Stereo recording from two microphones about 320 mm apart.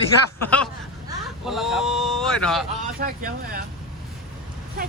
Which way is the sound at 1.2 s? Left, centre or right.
Centre.